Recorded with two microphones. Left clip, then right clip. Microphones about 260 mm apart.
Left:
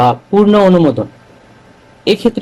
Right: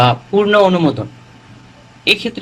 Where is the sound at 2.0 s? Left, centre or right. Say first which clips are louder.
Left 2 dB; left.